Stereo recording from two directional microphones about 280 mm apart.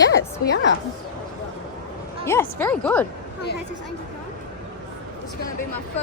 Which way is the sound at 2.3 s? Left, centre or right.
Centre.